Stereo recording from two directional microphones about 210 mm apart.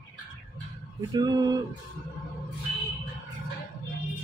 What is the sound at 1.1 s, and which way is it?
Speech, 20° right (ahead or behind).